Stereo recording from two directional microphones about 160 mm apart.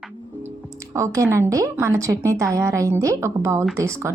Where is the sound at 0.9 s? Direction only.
20° right (ahead or behind).